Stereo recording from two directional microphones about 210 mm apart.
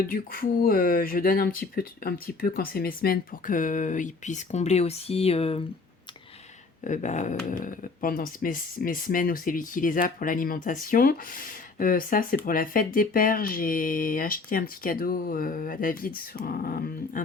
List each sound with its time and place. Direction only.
0.1 s speech: 45° left (ahead or behind)
6.8 s speech: 35° left (ahead or behind)